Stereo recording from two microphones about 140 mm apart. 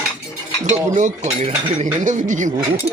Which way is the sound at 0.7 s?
60° right (ahead or behind).